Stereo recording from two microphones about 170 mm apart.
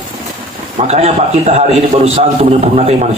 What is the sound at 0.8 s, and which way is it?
A man's voice, 40° right (ahead or behind).